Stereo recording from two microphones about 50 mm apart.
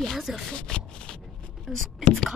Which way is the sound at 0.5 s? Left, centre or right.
Centre.